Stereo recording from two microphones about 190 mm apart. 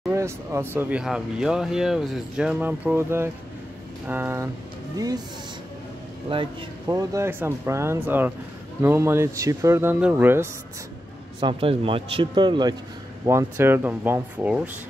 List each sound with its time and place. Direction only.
0.1 s a man's voice: 15° right (ahead or behind)
6.3 s a man's voice: 25° right (ahead or behind)
11.3 s a man's voice: 30° right (ahead or behind); by 14.7 s 5° right (ahead or behind)